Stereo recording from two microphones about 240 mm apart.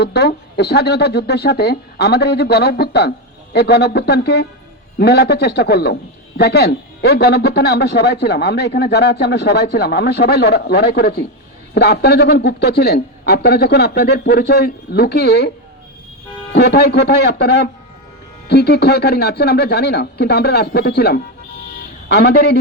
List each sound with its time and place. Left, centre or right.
0.0 s a man's voice: left
16.5 s a man's voice: left